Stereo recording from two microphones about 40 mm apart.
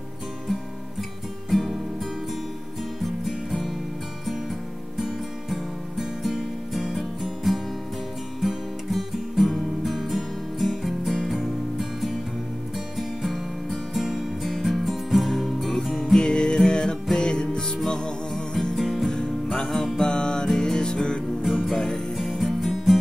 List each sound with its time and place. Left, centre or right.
1.5 s music: centre
2.8 s music: centre
16.2 s music: left
21.4 s music: centre
21.7 s music: centre